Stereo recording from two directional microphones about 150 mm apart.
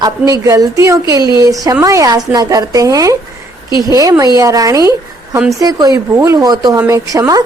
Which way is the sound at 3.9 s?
20° right (ahead or behind).